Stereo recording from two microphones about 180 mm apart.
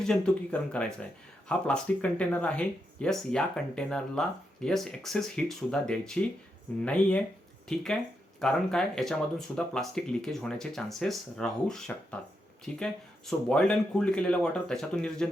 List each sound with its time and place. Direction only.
0.0 s speech: 5° left (ahead or behind)
8.4 s speech: 5° left (ahead or behind)